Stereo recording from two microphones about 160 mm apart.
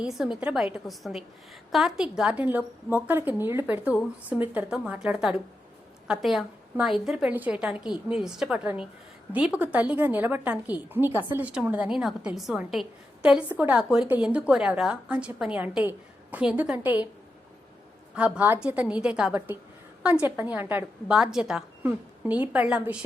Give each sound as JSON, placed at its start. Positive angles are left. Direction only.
{"t": 0.0, "sound": "a woman's voice", "side_deg": -5}
{"t": 18.1, "sound": "a woman's voice", "side_deg": -5}